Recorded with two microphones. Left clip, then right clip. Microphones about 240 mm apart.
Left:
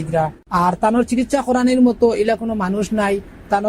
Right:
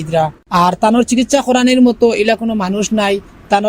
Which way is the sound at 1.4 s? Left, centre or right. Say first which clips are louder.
Right 4 dB; right.